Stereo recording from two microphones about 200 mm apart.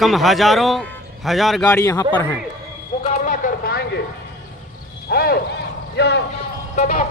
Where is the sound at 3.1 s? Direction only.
40° left (ahead or behind).